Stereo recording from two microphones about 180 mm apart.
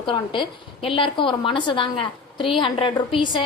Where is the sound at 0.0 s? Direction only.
25° left (ahead or behind).